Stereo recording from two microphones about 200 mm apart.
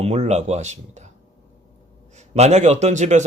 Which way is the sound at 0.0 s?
30° right (ahead or behind).